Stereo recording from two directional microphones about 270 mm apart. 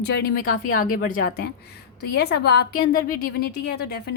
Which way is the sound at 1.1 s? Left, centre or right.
Left.